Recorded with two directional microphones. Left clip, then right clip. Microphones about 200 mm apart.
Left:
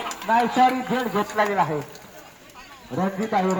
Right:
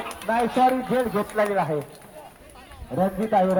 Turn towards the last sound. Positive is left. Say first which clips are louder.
# right 2 dB
turn(degrees=-40)  # may be behind; listen again after turning